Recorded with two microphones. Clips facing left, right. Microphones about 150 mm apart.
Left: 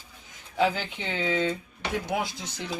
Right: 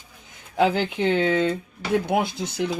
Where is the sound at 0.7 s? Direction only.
65° right (ahead or behind).